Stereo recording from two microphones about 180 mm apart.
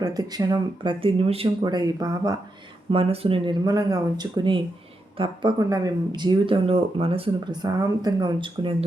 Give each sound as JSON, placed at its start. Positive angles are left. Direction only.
{"t": 0.0, "sound": "speech", "side_deg": -20}